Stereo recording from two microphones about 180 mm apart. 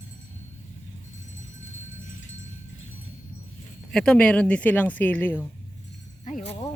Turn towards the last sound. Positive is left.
turn(degrees=35)  # may be behind; listen again after turning